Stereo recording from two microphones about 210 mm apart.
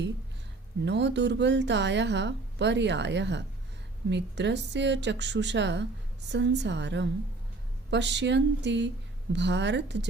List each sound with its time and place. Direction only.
0.9 s a woman's voice: 55° right (ahead or behind)